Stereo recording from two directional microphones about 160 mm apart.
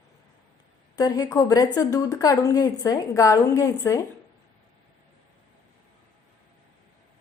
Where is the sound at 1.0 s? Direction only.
25° left (ahead or behind).